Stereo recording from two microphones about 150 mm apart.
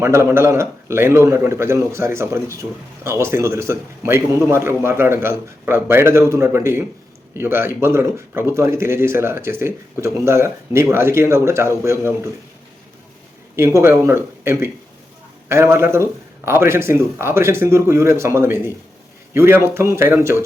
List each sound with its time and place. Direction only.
0.0 s speech: 15° right (ahead or behind)
13.6 s speech: 20° right (ahead or behind)